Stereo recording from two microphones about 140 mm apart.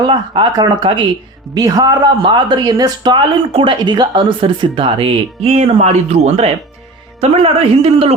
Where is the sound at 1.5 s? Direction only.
25° right (ahead or behind).